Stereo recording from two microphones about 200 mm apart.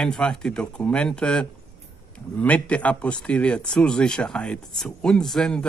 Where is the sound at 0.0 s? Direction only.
5° left (ahead or behind).